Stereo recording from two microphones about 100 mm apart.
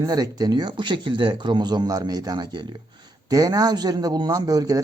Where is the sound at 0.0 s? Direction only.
40° right (ahead or behind).